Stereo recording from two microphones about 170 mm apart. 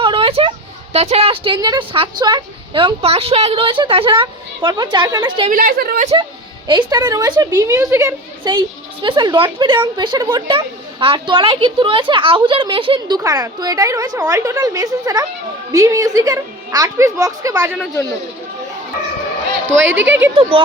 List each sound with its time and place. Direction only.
0.0 s a sound: 30° right (ahead or behind)
0.9 s a woman's voice: 35° right (ahead or behind)
5.5 s a woman's voice: 55° right (ahead or behind)
6.7 s a woman's voice: 25° right (ahead or behind)
8.4 s a woman's voice: 25° right (ahead or behind)
17.5 s speech: 5° right (ahead or behind)
19.8 s speech: 90° right
20.3 s speech: 30° right (ahead or behind)